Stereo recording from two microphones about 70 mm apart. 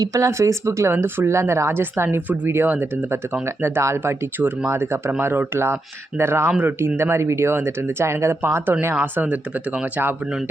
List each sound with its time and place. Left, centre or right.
0.0 s speech: right
0.3 s speech: right
9.1 s speech: centre